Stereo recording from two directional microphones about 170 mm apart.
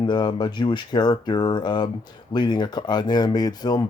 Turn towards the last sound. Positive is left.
turn(degrees=25)  # may be behind; listen again after turning